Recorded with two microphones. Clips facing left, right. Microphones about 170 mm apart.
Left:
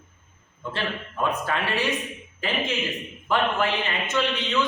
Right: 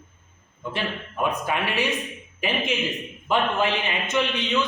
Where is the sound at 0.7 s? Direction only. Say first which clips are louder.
Right 1 dB; 15° right (ahead or behind).